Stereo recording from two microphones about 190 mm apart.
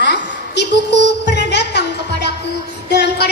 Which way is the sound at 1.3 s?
60° left (ahead or behind).